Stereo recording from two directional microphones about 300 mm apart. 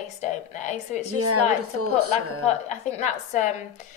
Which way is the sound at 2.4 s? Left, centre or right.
Left.